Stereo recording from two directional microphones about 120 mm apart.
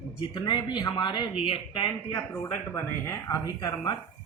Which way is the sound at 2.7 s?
20° left (ahead or behind).